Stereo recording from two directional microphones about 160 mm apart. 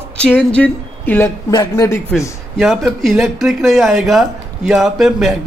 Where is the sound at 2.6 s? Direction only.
Centre (ahead or behind).